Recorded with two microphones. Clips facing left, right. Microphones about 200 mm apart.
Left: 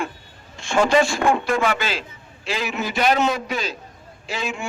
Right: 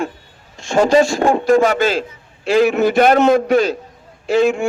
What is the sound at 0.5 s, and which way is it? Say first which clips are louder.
A man's voice: right 5 dB; 40° right (ahead or behind).